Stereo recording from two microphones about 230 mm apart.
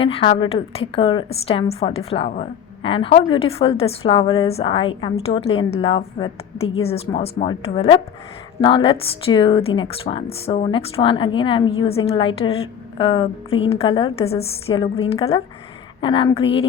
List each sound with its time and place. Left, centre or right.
0.0 s speech: left